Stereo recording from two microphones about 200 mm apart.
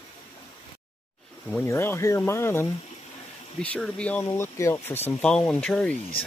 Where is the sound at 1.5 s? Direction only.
10° left (ahead or behind).